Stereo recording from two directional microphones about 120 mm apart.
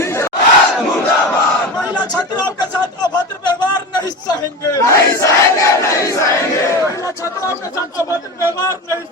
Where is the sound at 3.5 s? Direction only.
35° left (ahead or behind).